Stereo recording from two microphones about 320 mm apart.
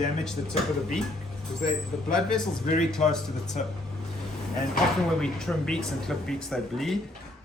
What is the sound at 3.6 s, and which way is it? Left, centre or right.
Speech, left.